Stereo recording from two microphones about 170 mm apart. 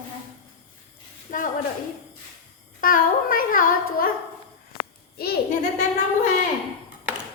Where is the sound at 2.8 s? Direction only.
55° left (ahead or behind).